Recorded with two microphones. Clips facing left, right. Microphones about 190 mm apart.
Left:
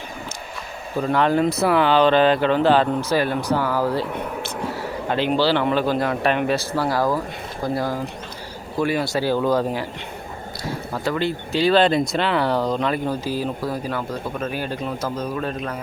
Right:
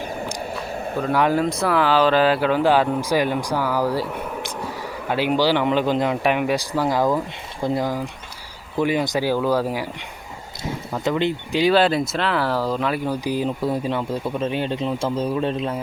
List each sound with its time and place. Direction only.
1.0 s speech: 10° right (ahead or behind)
1.5 s speech: 5° left (ahead or behind)
5.0 s speech: 10° right (ahead or behind)
11.0 s speech: 20° right (ahead or behind)